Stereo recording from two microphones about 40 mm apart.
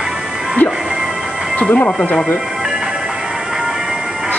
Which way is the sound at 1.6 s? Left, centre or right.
Left.